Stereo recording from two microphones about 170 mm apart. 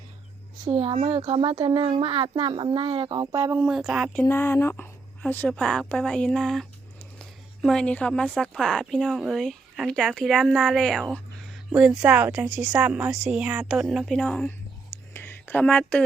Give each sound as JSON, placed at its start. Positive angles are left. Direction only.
{"t": 0.7, "sound": "speech", "side_deg": -35}
{"t": 3.6, "sound": "speech", "side_deg": -5}
{"t": 4.2, "sound": "speech", "side_deg": 15}
{"t": 7.2, "sound": "a sound", "side_deg": 5}
{"t": 8.4, "sound": "speech", "side_deg": 5}
{"t": 15.1, "sound": "a sound", "side_deg": 15}